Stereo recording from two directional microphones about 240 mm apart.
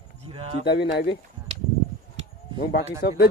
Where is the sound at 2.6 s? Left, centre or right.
Left.